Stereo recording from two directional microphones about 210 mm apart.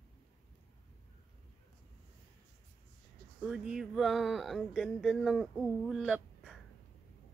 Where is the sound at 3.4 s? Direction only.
5° right (ahead or behind).